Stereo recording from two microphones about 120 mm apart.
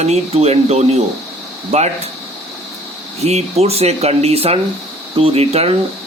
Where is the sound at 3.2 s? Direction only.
60° right (ahead or behind).